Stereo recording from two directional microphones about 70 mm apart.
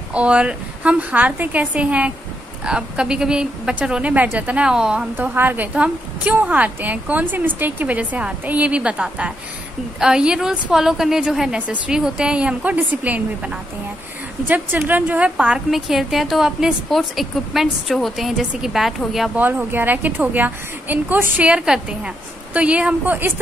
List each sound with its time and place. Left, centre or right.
0.1 s a woman's voice: centre
4.6 s speech: centre
5.1 s a woman's voice: right
5.8 s a woman's voice: centre
11.5 s a woman's voice: centre
15.7 s speech: centre
19.3 s a woman's voice: right
21.5 s speech: centre
23.0 s a woman's voice: right